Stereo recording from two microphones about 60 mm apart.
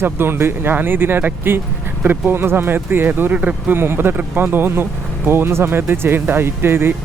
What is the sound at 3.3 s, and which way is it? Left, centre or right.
Speech, right.